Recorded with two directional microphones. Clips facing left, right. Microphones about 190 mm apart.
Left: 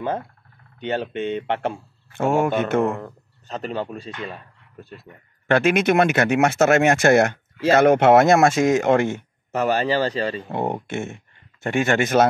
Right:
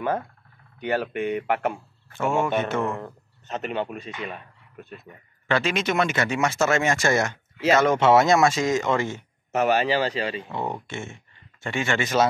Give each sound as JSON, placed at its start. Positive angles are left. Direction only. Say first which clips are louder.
{"t": 0.7, "sound": "speech", "louder": "left 1 dB", "side_deg": 25}
{"t": 2.2, "sound": "speech", "louder": "left 4 dB", "side_deg": 55}
{"t": 3.0, "sound": "speech", "louder": "left 1 dB", "side_deg": 35}
{"t": 5.5, "sound": "speech", "louder": "left 6 dB", "side_deg": 55}
{"t": 9.5, "sound": "a man's voice", "louder": "left 1 dB", "side_deg": 35}
{"t": 10.5, "sound": "speech", "louder": "left 5 dB", "side_deg": 55}